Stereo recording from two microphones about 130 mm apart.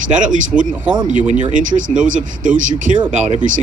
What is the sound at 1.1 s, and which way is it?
Speech, 70° right (ahead or behind).